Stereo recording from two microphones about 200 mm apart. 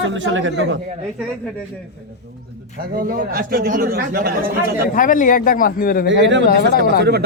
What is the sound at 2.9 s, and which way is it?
A man's voice, 45° right (ahead or behind).